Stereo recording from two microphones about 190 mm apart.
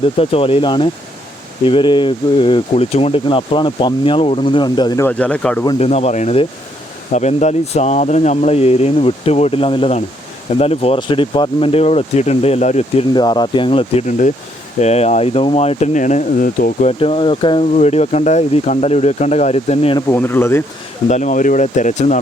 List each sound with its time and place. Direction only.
0.2 s speech: 30° left (ahead or behind)
5.0 s speech: 5° left (ahead or behind)
5.6 s speech: 30° left (ahead or behind)
13.1 s speech: 25° left (ahead or behind); by 16.9 s 45° left (ahead or behind)
17.0 s speech: 30° left (ahead or behind)
20.1 s speech: 10° left (ahead or behind)
21.1 s speech: 40° left (ahead or behind)